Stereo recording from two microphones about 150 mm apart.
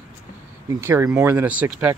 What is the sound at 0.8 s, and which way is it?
Speech, 15° right (ahead or behind).